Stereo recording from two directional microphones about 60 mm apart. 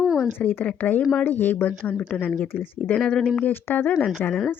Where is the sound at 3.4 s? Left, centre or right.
Left.